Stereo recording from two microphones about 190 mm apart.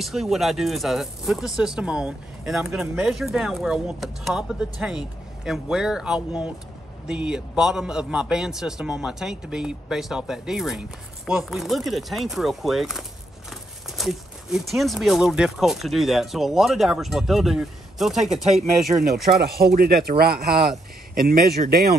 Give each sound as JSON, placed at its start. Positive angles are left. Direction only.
{"t": 0.0, "sound": "speech", "side_deg": 0}
{"t": 19.2, "sound": "speech", "side_deg": -55}